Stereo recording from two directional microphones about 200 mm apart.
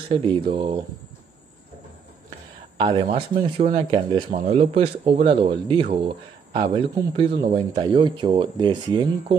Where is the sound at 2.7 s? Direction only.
25° right (ahead or behind).